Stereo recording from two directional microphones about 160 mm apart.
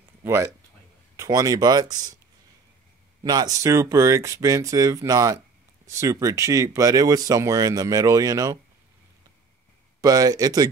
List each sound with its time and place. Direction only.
0.2 s speech: 15° right (ahead or behind)
3.3 s speech: 25° right (ahead or behind)
10.0 s speech: 25° right (ahead or behind)